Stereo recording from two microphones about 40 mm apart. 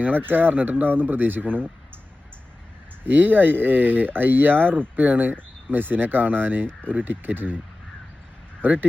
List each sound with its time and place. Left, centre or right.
0.0 s speech: right
3.0 s speech: right
8.6 s speech: right